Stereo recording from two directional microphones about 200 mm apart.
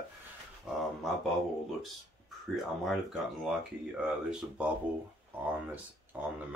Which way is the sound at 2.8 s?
Centre (ahead or behind).